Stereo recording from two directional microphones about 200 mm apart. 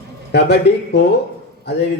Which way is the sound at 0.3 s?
55° left (ahead or behind).